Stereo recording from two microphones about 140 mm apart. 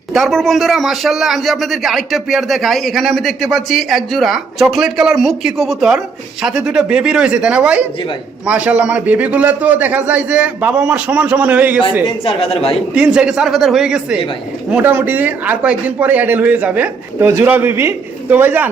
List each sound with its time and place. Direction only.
0.1 s a man's voice: centre (ahead or behind)
12.2 s speech: 40° left (ahead or behind)
12.9 s a man's voice: 10° right (ahead or behind)